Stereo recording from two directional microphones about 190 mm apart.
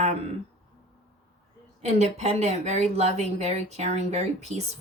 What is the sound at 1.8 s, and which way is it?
A woman's voice, 35° right (ahead or behind).